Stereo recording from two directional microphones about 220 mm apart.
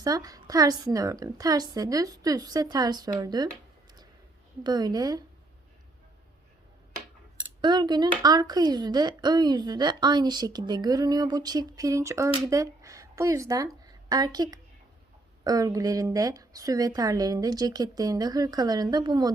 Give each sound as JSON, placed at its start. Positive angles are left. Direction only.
{"t": 0.0, "sound": "a woman's voice", "side_deg": -15}
{"t": 4.6, "sound": "a woman's voice", "side_deg": -20}
{"t": 7.6, "sound": "a woman's voice", "side_deg": -20}